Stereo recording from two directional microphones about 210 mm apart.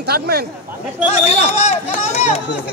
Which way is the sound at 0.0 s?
50° right (ahead or behind).